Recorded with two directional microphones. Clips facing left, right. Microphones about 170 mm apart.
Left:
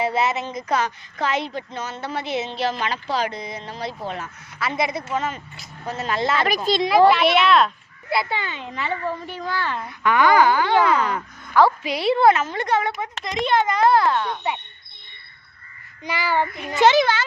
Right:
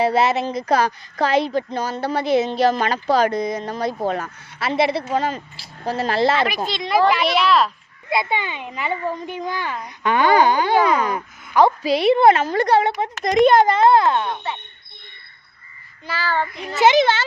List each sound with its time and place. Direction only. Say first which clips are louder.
0.0 s speech: right 4 dB; 35° right (ahead or behind)
4.6 s speech: right 5 dB; 30° right (ahead or behind)
6.8 s child singing: left 2 dB; 5° left (ahead or behind)
7.1 s speech: left 1 dB; centre (ahead or behind)
8.1 s a child's voice: right 2 dB; 20° right (ahead or behind)
13.2 s speech: right 8 dB; 45° right (ahead or behind)
13.7 s speech: right 3 dB; 20° right (ahead or behind)
16.0 s child singing: left 1 dB; 15° left (ahead or behind)
16.8 s speech: right 1 dB; 20° right (ahead or behind)